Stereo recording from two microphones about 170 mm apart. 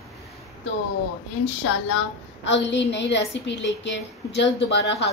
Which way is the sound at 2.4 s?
90° left.